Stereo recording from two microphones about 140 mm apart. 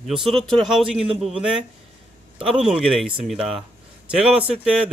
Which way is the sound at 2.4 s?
5° right (ahead or behind).